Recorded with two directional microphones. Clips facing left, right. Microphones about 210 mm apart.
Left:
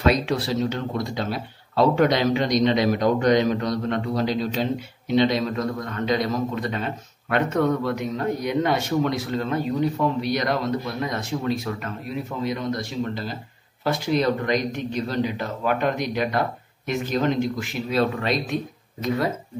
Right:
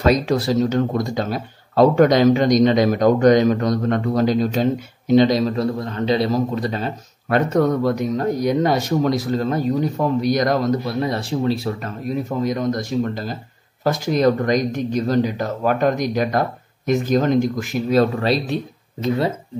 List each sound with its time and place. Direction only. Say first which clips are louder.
0.0 s speech: right 4 dB; 40° right (ahead or behind); by 19.3 s 25° right (ahead or behind)